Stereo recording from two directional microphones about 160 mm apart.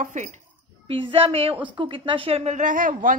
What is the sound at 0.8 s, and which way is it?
A woman's voice, 35° right (ahead or behind).